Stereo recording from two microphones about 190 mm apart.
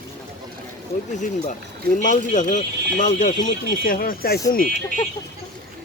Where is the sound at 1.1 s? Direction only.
40° left (ahead or behind).